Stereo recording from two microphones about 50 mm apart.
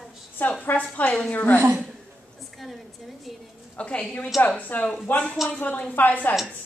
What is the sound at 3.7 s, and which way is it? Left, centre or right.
A woman's voice, left.